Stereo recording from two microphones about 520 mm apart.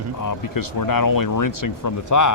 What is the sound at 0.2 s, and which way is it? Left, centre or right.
Speech, left.